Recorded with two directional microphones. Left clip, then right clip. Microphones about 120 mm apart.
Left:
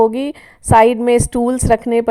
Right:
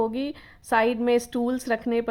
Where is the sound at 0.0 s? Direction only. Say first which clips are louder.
Left 12 dB; 50° left (ahead or behind).